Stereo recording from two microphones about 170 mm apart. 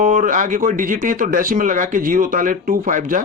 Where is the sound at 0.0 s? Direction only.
50° right (ahead or behind).